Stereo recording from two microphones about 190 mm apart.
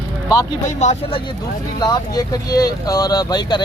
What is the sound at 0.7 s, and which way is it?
Speech, 35° left (ahead or behind).